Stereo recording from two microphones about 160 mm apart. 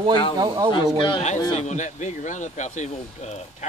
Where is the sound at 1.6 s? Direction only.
45° left (ahead or behind).